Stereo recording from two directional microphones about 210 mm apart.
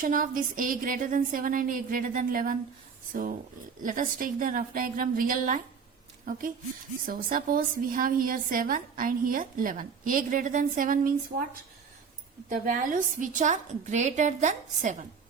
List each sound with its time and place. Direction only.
0.0 s a woman's voice: 40° right (ahead or behind)
12.5 s a woman's voice: 40° right (ahead or behind)